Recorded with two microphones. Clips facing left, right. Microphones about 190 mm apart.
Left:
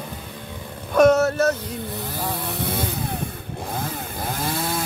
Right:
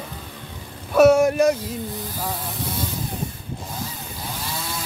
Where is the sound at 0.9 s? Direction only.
10° right (ahead or behind).